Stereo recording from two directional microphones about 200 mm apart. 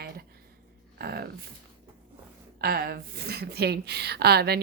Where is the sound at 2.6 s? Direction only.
50° right (ahead or behind).